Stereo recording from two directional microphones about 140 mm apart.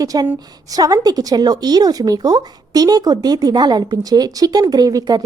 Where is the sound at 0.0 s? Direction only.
25° right (ahead or behind).